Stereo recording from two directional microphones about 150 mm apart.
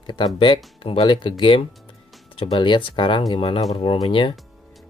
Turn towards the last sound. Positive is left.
turn(degrees=35)  # may be behind; listen again after turning